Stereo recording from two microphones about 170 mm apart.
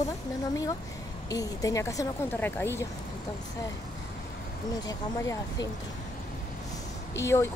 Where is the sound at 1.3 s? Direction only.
20° left (ahead or behind).